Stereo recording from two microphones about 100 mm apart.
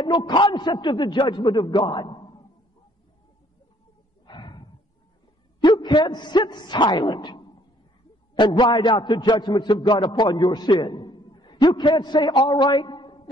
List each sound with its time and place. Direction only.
0.0 s a man's voice: 45° left (ahead or behind)
4.3 s a sound: 50° left (ahead or behind)
5.6 s a man's voice: 50° left (ahead or behind)